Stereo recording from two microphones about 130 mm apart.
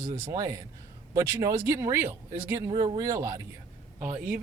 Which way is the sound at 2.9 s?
25° right (ahead or behind).